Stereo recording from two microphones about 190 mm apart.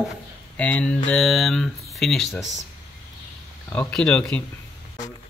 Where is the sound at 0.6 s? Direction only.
5° left (ahead or behind).